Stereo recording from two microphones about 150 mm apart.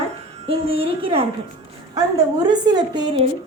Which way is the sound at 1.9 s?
25° right (ahead or behind).